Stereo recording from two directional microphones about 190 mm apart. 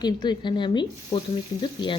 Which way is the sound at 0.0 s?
25° left (ahead or behind).